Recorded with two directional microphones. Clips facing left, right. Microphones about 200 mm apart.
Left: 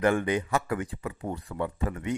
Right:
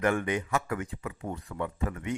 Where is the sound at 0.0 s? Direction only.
30° left (ahead or behind).